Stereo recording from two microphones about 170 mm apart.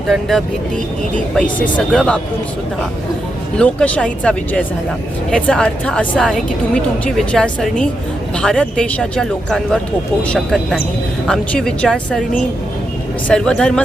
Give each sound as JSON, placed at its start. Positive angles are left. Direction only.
{"t": 0.1, "sound": "a woman's voice", "side_deg": 0}
{"t": 3.6, "sound": "a woman's voice", "side_deg": 5}
{"t": 13.2, "sound": "a woman's voice", "side_deg": 5}